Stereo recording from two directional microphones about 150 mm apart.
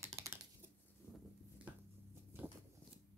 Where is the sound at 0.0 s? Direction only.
20° right (ahead or behind).